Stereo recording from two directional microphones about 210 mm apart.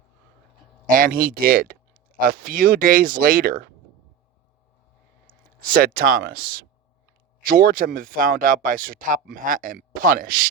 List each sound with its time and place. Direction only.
0.9 s speech: 40° right (ahead or behind)
5.6 s speech: 45° right (ahead or behind)